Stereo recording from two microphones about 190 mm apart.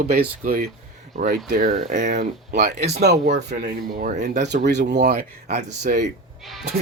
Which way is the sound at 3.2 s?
40° right (ahead or behind).